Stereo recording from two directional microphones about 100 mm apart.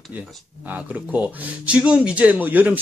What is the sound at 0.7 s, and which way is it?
Speech, 15° right (ahead or behind).